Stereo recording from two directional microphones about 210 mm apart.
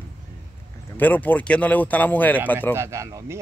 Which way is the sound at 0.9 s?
10° left (ahead or behind).